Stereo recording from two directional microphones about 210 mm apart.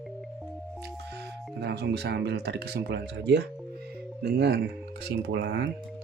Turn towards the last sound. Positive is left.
turn(degrees=-60)  # may be behind; listen again after turning